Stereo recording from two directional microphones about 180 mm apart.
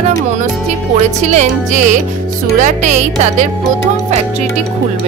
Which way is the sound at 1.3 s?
40° right (ahead or behind).